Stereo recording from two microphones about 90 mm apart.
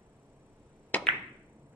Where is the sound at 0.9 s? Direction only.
15° left (ahead or behind).